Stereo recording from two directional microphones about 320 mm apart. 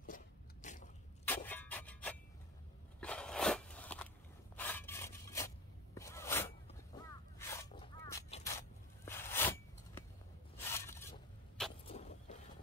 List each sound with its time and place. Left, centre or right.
0.0 s biting: left
1.2 s a sound: centre
3.0 s biting: centre
4.6 s rub: centre
5.9 s a sound: centre
11.9 s vehicle: left